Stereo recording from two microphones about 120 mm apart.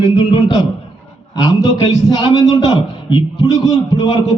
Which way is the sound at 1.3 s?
35° left (ahead or behind).